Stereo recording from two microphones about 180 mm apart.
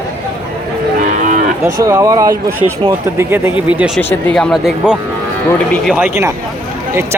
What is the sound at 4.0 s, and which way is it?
Speech, 10° left (ahead or behind).